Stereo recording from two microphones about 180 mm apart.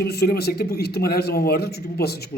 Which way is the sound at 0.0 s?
60° left (ahead or behind).